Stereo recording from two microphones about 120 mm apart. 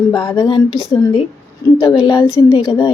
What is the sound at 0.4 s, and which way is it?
Speech, 45° left (ahead or behind).